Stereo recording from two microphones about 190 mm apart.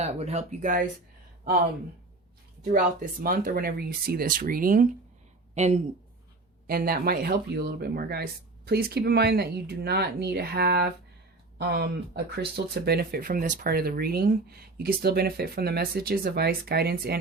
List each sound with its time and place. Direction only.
0.0 s speech: 35° right (ahead or behind)
2.7 s speech: 45° right (ahead or behind)
5.5 s speech: 35° right (ahead or behind)
6.7 s speech: 50° right (ahead or behind)